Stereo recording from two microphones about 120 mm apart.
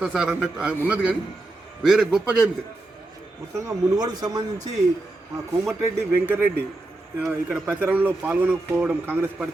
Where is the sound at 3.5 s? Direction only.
30° right (ahead or behind).